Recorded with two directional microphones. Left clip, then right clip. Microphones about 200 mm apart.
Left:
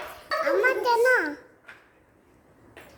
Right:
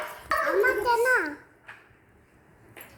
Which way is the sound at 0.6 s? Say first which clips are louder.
Left 4 dB; 30° left (ahead or behind).